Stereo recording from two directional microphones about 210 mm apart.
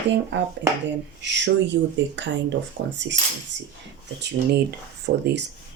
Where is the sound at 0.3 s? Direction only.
60° right (ahead or behind).